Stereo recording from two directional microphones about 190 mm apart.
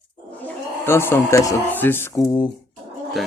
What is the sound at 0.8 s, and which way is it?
Speech, 10° left (ahead or behind).